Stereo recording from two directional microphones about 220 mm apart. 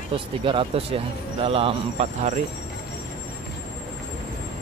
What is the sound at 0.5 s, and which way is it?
Speech, 25° right (ahead or behind).